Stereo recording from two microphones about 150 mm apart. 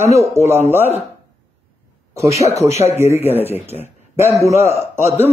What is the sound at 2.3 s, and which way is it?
Speech, 45° left (ahead or behind).